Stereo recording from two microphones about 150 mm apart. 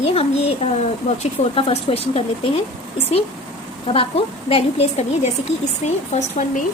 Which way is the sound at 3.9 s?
40° left (ahead or behind).